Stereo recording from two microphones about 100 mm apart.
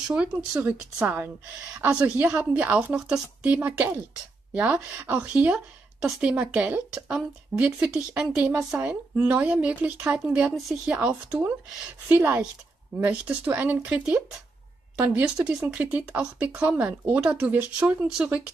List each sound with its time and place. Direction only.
0.1 s a woman's voice: 10° right (ahead or behind)
15.4 s speech: 15° right (ahead or behind)